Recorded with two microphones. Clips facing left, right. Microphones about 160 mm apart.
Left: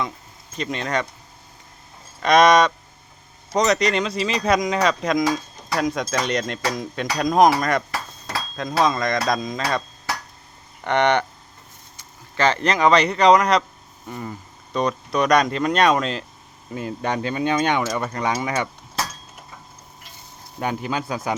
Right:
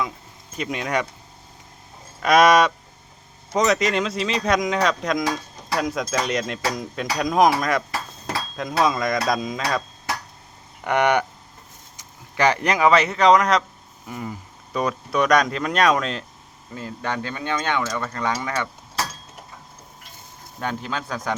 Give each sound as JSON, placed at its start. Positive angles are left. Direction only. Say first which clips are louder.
{"t": 0.5, "sound": "speech", "louder": "even", "side_deg": -10}
{"t": 2.2, "sound": "speech", "louder": "left 1 dB", "side_deg": -5}
{"t": 10.8, "sound": "speech", "louder": "left 1 dB", "side_deg": -10}
{"t": 16.7, "sound": "speech", "louder": "left 3 dB", "side_deg": 20}
{"t": 20.6, "sound": "speech", "louder": "left 3 dB", "side_deg": 10}